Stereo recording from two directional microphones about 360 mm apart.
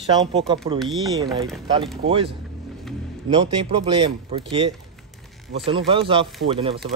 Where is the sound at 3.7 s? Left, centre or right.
Centre.